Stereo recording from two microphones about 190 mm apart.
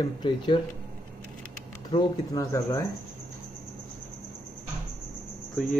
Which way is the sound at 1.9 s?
20° left (ahead or behind).